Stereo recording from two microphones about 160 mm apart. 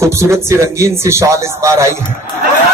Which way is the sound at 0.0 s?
15° right (ahead or behind).